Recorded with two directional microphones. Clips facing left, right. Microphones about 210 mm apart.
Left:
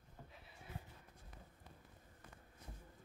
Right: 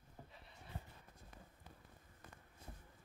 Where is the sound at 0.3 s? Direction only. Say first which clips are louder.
Even; centre (ahead or behind).